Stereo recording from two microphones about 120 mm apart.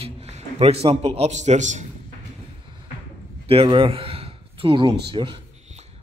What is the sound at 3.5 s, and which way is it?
Speech, 50° right (ahead or behind).